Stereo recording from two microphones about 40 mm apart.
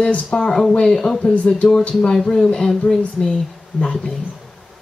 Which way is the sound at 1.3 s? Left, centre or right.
Left.